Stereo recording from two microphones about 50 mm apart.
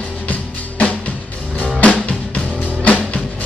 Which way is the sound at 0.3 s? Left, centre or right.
Left.